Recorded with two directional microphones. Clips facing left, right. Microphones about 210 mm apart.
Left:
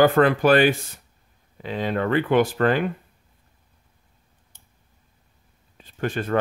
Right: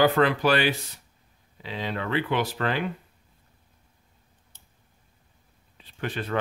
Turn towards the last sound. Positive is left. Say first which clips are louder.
# left 5 dB
turn(degrees=45)  # may be behind; listen again after turning